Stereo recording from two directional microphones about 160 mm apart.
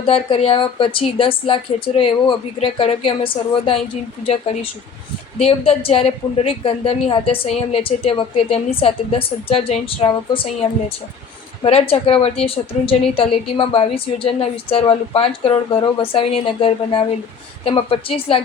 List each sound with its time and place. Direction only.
0.0 s a woman's voice: 35° left (ahead or behind)
18.3 s a woman's voice: 35° left (ahead or behind)